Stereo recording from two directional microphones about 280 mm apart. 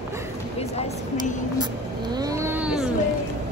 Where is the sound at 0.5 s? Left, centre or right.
Left.